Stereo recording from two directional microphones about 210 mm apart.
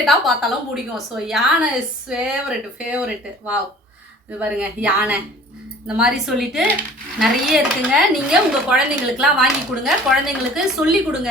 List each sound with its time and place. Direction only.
0.0 s speech: centre (ahead or behind)